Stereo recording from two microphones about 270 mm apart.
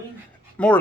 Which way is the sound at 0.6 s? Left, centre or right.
Centre.